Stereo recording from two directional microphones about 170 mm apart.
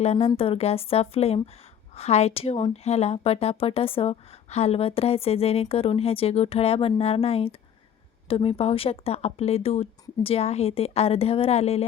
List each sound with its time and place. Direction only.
0.0 s speech: 35° left (ahead or behind)